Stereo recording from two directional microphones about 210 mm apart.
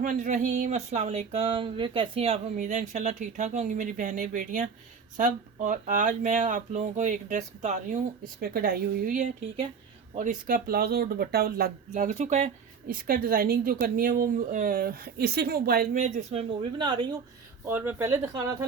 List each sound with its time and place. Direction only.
0.0 s a woman's voice: 40° right (ahead or behind)
12.9 s a woman's voice: 45° right (ahead or behind); by 17.1 s 20° right (ahead or behind)
17.7 s speech: 10° right (ahead or behind)